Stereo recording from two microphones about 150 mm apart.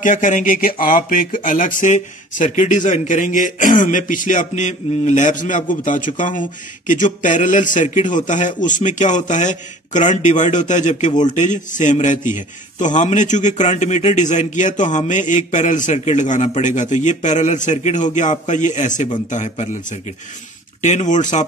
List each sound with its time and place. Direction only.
0.0 s a man's voice: 60° left (ahead or behind)
20.8 s a man's voice: 55° left (ahead or behind)